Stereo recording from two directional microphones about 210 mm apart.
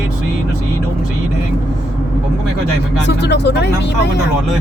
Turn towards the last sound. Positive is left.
turn(degrees=55)  # may be behind; listen again after turning